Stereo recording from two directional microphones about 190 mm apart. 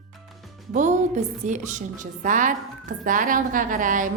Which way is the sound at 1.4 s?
40° right (ahead or behind).